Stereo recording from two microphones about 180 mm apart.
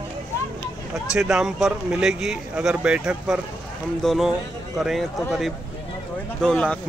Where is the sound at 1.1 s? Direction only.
5° right (ahead or behind).